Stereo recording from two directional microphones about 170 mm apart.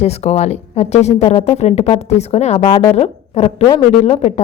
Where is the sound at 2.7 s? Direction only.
30° left (ahead or behind).